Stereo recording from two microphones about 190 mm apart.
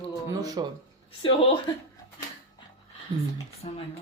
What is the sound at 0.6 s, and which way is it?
Speech, 20° right (ahead or behind).